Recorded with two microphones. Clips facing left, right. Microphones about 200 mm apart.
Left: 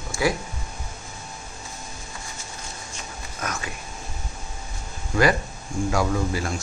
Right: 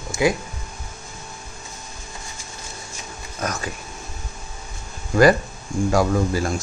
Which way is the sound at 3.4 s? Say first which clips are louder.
Right 4 dB; 35° right (ahead or behind).